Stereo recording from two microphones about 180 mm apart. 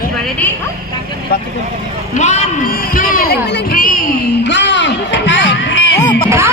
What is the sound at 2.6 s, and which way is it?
Speech, 55° left (ahead or behind).